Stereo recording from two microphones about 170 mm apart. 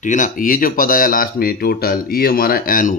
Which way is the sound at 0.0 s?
50° left (ahead or behind).